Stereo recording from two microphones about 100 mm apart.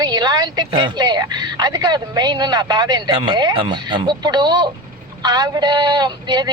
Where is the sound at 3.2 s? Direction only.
45° right (ahead or behind).